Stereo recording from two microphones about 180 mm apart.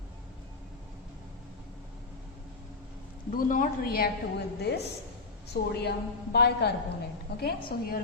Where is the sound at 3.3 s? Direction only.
50° left (ahead or behind); by 6.7 s 65° left (ahead or behind).